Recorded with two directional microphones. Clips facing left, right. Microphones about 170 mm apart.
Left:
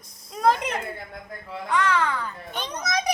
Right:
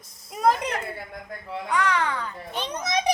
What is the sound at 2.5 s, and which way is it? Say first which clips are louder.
Speech: right 2 dB; 30° right (ahead or behind).